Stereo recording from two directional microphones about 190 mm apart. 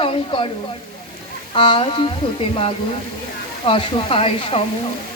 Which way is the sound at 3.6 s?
30° left (ahead or behind).